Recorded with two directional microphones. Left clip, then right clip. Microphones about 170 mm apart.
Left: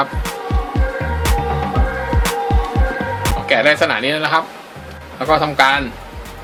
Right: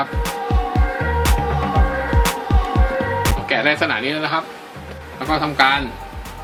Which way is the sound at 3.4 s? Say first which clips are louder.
Left 6 dB; 50° left (ahead or behind).